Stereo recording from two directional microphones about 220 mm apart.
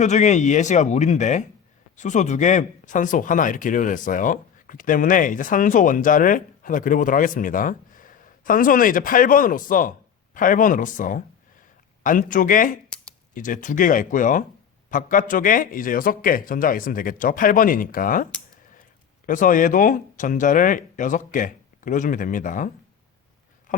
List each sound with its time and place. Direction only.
0.0 s speech: 30° left (ahead or behind)
12.9 s a sound: 5° left (ahead or behind)
13.3 s speech: 35° left (ahead or behind)